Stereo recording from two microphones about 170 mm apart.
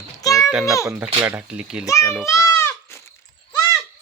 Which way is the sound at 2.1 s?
5° right (ahead or behind).